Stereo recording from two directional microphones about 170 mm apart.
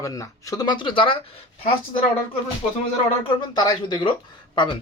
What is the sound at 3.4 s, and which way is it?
Speech, 25° left (ahead or behind).